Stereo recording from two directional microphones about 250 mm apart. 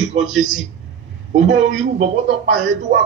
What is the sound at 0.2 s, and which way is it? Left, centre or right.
Speech, right.